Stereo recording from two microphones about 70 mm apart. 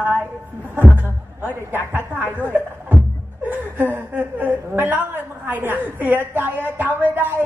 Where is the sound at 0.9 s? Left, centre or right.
Right.